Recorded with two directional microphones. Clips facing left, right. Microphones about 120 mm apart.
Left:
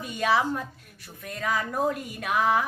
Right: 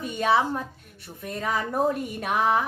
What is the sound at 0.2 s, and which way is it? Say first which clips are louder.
Speech: right 2 dB; 25° right (ahead or behind).